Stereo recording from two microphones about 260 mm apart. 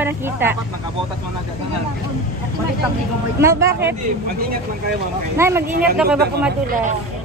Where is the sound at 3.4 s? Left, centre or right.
Centre.